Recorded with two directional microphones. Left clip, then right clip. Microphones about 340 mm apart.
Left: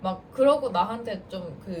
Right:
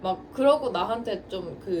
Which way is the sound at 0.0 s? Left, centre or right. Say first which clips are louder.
Left 1 dB; centre.